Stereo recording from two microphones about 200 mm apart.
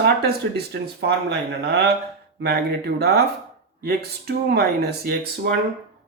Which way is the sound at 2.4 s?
55° right (ahead or behind).